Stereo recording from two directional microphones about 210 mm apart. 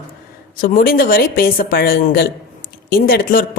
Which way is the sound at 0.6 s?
40° left (ahead or behind).